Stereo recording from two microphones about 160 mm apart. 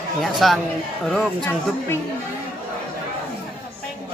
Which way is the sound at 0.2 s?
Centre (ahead or behind).